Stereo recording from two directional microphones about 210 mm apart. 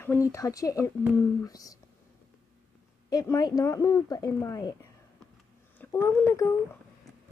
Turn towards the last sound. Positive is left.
turn(degrees=15)  # may be behind; listen again after turning